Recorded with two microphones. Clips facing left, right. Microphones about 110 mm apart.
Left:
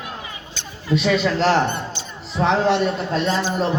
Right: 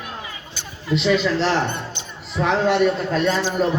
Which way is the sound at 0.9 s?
45° left (ahead or behind).